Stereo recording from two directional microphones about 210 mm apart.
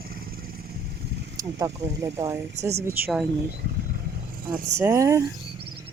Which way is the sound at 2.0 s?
15° right (ahead or behind).